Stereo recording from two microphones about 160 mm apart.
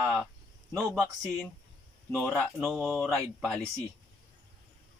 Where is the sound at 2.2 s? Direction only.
5° left (ahead or behind).